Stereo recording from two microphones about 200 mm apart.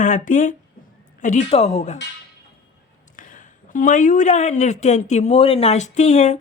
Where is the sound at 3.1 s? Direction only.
40° left (ahead or behind).